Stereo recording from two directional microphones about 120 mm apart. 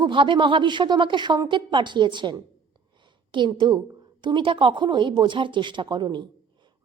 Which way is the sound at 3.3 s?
40° right (ahead or behind).